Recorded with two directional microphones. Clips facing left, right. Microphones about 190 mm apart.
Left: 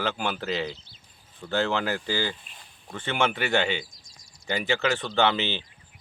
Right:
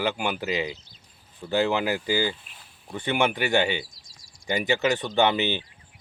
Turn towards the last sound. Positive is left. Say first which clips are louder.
# right 2 dB
turn(degrees=-15)  # may be behind; listen again after turning